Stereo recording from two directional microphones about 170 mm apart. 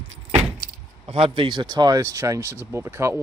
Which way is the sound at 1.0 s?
30° right (ahead or behind).